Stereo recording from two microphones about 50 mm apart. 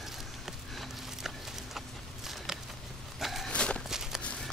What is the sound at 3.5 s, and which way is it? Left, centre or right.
Walk, centre.